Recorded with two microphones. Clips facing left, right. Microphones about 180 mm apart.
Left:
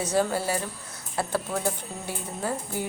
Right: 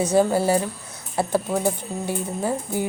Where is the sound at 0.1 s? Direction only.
20° right (ahead or behind).